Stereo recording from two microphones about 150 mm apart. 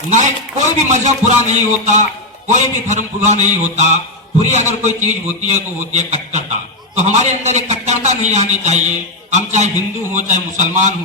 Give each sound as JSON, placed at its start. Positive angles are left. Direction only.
{"t": 0.1, "sound": "a man's voice", "side_deg": -55}